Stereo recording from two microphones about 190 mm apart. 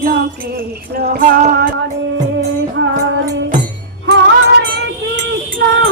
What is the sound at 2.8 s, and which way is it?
Music, 75° right (ahead or behind).